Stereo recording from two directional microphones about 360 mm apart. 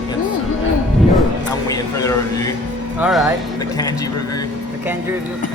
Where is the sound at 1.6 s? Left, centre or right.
Centre.